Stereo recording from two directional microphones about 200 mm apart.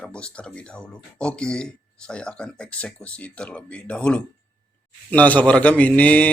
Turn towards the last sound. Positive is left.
turn(degrees=5)  # may be behind; listen again after turning